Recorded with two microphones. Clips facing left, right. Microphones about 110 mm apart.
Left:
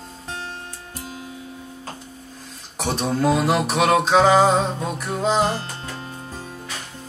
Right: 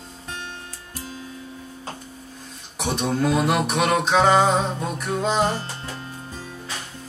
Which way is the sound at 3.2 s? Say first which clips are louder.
Left 2 dB; 35° left (ahead or behind).